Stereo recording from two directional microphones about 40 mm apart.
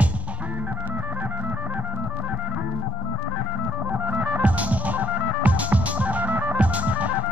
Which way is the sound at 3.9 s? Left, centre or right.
Right.